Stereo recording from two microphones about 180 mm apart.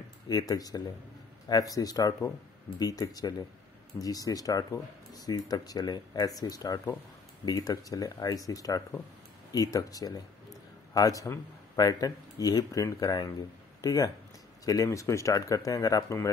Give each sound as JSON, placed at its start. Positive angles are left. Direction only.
{"t": 0.3, "sound": "speech", "side_deg": 20}